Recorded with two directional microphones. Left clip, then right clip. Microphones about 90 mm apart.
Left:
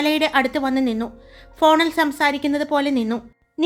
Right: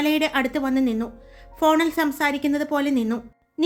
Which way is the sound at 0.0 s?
40° left (ahead or behind).